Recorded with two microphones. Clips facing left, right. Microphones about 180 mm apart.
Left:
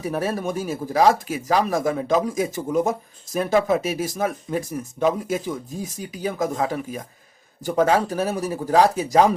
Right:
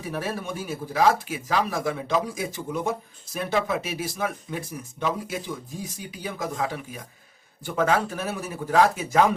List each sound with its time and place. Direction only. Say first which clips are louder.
0.0 s speech: left 6 dB; 40° left (ahead or behind)